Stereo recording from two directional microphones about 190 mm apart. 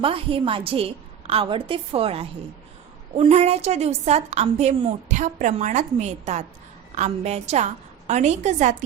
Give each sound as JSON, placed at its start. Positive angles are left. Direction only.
{"t": 0.0, "sound": "a woman's voice", "side_deg": -30}